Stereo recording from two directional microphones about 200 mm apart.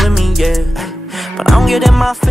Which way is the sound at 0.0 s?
Centre (ahead or behind).